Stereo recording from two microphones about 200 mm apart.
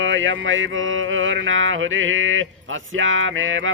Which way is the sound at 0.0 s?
70° right (ahead or behind).